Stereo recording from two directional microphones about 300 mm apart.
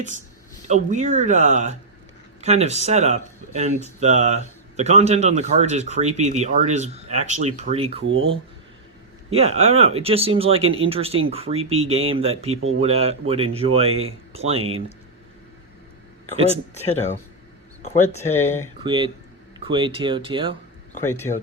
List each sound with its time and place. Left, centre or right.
0.7 s speech: right
8.0 s speech: right
9.3 s speech: right
16.7 s speech: left
18.2 s speech: centre
18.8 s speech: centre
21.0 s speech: centre